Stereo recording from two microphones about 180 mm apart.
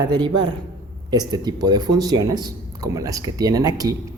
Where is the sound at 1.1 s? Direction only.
20° right (ahead or behind).